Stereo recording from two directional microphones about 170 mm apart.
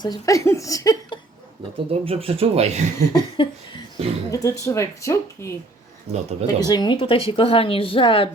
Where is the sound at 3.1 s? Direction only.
30° left (ahead or behind).